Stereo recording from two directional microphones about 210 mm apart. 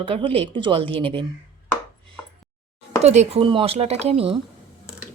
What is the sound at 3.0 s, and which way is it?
Speech, 30° right (ahead or behind).